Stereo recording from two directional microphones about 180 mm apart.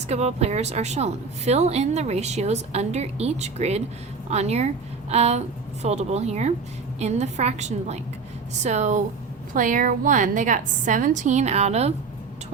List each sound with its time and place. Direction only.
0.1 s a woman's voice: 35° right (ahead or behind)